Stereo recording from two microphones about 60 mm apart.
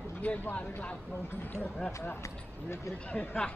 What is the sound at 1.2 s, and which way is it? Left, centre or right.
Speech, left.